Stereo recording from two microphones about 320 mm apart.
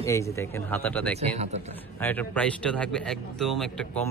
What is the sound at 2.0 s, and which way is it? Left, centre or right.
A man's voice, centre.